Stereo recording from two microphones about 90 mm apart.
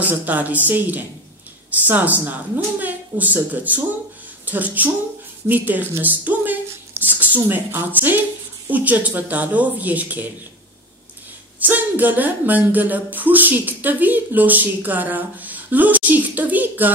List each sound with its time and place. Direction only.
0.0 s speech: 20° right (ahead or behind)
11.6 s speech: 20° right (ahead or behind)